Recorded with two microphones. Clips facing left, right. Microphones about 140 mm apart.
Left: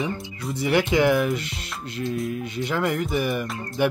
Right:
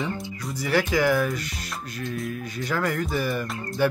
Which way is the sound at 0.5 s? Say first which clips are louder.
Left 3 dB; 25° left (ahead or behind).